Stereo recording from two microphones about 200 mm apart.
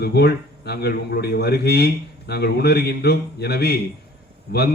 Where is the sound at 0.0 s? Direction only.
55° left (ahead or behind).